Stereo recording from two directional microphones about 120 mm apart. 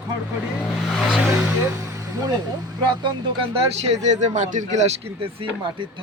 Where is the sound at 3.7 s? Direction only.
65° right (ahead or behind).